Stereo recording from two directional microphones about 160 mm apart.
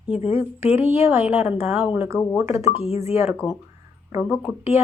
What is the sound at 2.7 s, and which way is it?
Speech, 40° left (ahead or behind).